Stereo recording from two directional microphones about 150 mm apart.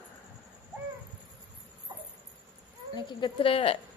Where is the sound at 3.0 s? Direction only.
30° left (ahead or behind).